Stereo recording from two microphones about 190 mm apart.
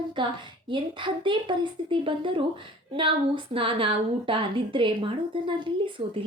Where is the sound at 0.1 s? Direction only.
25° right (ahead or behind).